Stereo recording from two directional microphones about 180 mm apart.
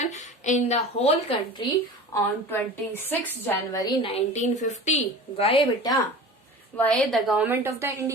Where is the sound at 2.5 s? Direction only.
10° left (ahead or behind).